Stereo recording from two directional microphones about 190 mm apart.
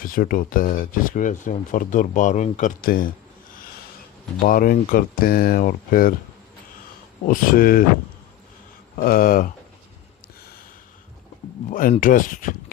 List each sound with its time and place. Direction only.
0.0 s speech: 45° left (ahead or behind)
4.4 s speech: 45° left (ahead or behind)
7.3 s speech: 50° left (ahead or behind)
9.0 s speech: 50° left (ahead or behind)
11.7 s speech: 45° left (ahead or behind)